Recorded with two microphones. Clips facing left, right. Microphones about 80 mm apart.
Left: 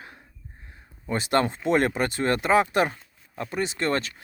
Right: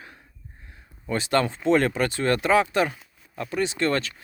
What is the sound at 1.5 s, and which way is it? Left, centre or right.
Speech, centre.